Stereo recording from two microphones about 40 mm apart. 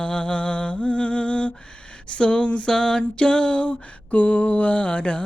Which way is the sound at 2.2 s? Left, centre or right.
Left.